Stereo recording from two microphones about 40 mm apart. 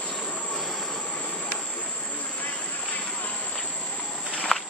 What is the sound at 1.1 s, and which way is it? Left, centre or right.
Vehicle, left.